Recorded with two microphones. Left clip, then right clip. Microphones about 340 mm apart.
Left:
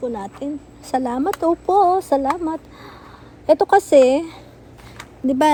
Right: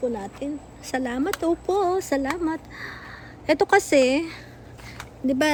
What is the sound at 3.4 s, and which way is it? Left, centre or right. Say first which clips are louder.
A woman's voice: left 5 dB; centre.